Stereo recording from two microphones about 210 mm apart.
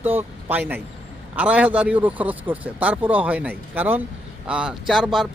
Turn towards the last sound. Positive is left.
turn(degrees=0)  # may be behind; listen again after turning